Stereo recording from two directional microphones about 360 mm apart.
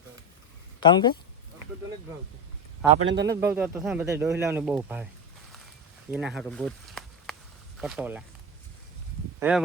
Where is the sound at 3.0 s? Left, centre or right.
Right.